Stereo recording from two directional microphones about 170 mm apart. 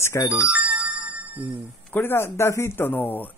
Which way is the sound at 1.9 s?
10° left (ahead or behind).